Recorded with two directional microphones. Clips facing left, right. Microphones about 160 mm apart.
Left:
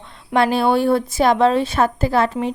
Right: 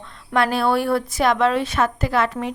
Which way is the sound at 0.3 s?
30° left (ahead or behind).